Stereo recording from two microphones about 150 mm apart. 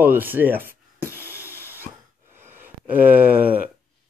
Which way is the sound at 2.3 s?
15° right (ahead or behind).